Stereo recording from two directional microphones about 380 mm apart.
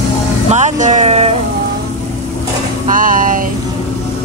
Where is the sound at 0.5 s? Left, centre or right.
Centre.